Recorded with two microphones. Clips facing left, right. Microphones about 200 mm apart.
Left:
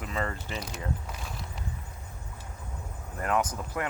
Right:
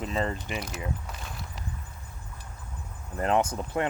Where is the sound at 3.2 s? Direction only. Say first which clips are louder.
Right 3 dB; 25° right (ahead or behind).